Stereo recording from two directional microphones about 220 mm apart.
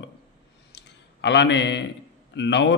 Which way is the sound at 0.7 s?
50° left (ahead or behind).